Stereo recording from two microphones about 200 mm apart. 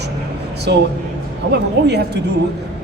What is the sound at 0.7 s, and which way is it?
A man's voice, 55° right (ahead or behind).